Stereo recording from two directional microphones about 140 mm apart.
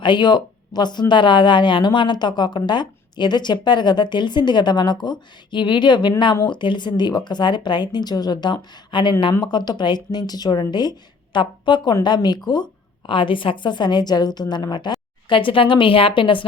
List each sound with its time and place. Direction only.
0.0 s speech: 35° left (ahead or behind)